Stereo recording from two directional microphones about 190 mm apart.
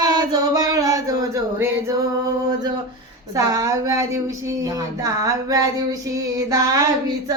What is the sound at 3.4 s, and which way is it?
Speech, 15° right (ahead or behind).